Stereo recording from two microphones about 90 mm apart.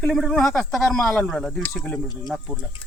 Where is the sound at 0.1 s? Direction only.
5° left (ahead or behind).